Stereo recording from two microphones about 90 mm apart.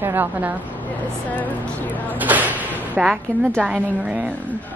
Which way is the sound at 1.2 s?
15° left (ahead or behind).